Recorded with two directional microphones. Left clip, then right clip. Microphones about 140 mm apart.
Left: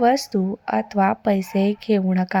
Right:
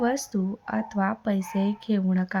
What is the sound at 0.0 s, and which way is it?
Speech, 30° left (ahead or behind).